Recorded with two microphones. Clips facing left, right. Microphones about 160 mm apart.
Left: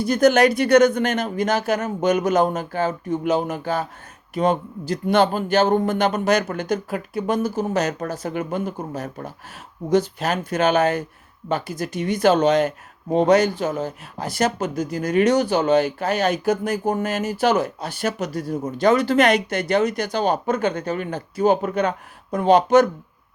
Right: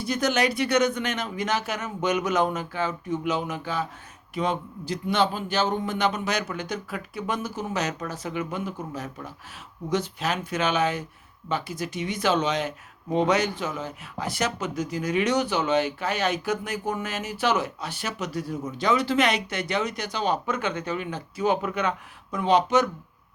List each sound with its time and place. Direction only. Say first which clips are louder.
0.0 s speech: left 9 dB; 50° left (ahead or behind)
7.3 s speech: left 8 dB; 35° left (ahead or behind)